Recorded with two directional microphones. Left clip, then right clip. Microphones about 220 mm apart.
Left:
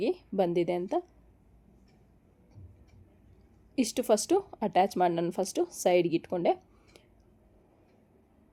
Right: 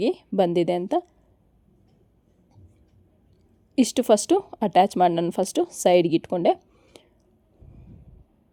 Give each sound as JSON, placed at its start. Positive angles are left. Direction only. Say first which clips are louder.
{"t": 0.0, "sound": "speech", "louder": "right 7 dB", "side_deg": -35}
{"t": 3.8, "sound": "speech", "louder": "right 7 dB", "side_deg": -35}